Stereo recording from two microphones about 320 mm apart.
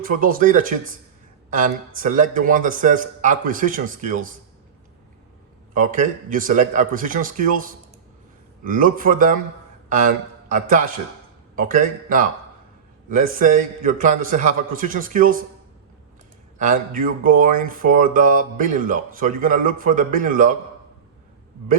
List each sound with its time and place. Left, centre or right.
0.0 s speech: right
5.7 s a man's voice: right
16.6 s speech: right